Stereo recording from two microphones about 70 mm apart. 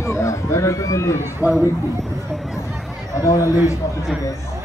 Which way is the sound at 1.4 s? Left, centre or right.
Left.